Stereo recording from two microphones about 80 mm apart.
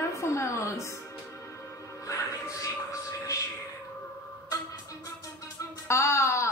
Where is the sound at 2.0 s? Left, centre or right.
Left.